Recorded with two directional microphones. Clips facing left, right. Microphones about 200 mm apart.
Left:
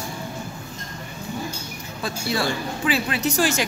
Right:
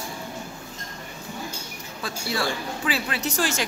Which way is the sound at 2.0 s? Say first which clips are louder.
Left 3 dB; 20° left (ahead or behind).